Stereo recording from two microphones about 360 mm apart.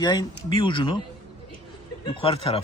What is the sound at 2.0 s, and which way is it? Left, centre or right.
Speech, centre.